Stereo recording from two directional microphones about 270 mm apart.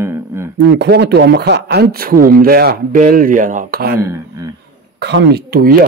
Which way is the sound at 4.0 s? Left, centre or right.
Centre.